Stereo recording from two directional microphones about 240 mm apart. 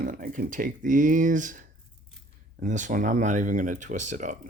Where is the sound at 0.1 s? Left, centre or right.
Right.